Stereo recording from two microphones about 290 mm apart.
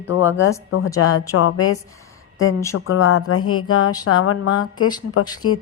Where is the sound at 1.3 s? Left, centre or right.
Left.